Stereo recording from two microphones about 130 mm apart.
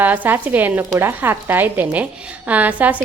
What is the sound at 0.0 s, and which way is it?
A woman's voice, 15° right (ahead or behind).